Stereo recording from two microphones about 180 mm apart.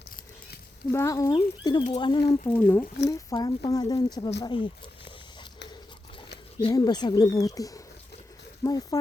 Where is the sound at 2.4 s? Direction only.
10° left (ahead or behind).